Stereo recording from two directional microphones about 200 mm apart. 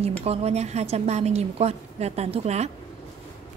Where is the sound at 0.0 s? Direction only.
30° right (ahead or behind).